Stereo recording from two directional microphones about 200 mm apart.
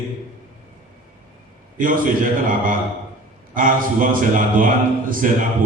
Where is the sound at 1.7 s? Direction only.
45° right (ahead or behind).